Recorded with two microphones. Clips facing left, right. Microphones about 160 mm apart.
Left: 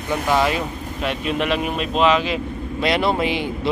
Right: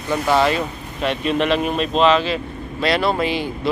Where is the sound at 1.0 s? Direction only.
5° left (ahead or behind).